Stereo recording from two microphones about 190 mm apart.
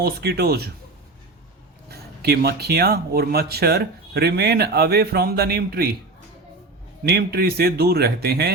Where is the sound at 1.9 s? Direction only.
55° right (ahead or behind).